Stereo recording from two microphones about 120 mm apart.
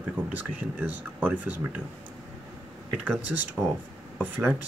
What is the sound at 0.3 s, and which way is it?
Speech, 15° right (ahead or behind).